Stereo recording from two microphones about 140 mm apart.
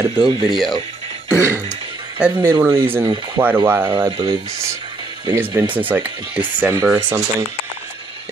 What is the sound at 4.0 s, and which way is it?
Speech, 30° right (ahead or behind).